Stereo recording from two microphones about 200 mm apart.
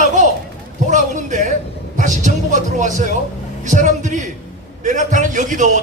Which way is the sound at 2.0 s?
40° right (ahead or behind).